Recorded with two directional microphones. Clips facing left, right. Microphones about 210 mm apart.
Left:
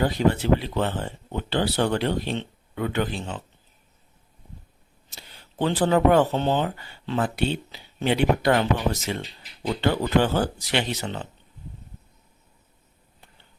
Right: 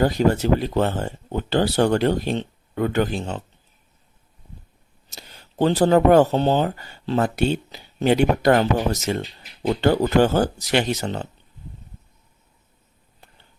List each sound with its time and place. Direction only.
0.0 s speech: 45° right (ahead or behind)
5.0 s speech: 40° right (ahead or behind)